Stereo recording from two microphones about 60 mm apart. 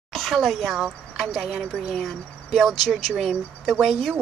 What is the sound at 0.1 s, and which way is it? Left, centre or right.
Speech, centre.